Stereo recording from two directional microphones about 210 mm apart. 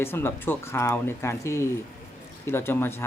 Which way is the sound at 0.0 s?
10° left (ahead or behind).